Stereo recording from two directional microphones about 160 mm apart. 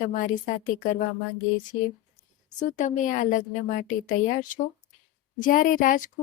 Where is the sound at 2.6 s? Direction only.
50° left (ahead or behind).